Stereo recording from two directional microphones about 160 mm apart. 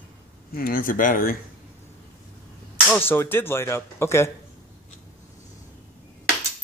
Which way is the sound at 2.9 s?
15° left (ahead or behind).